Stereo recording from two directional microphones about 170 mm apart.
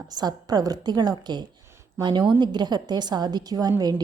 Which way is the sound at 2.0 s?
25° right (ahead or behind).